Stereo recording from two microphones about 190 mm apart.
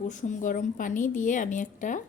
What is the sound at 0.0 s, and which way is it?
A woman's voice, 40° left (ahead or behind).